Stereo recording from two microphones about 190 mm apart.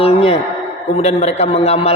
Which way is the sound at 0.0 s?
30° left (ahead or behind).